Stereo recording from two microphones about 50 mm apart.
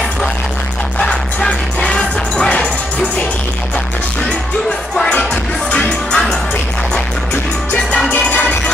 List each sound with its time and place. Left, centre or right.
0.9 s music: centre
5.1 s music: left
8.1 s music: left